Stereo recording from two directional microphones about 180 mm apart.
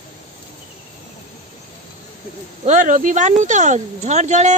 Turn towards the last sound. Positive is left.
turn(degrees=-40)  # may be behind; listen again after turning